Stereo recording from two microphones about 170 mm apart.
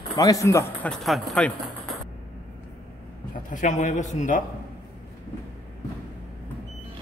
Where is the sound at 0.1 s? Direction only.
20° left (ahead or behind).